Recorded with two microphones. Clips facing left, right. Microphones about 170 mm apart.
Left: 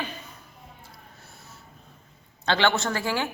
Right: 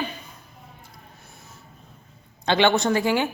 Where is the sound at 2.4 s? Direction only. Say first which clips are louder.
Right 4 dB; 15° right (ahead or behind).